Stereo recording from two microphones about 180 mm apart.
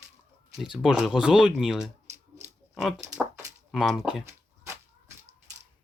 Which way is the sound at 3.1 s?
10° right (ahead or behind).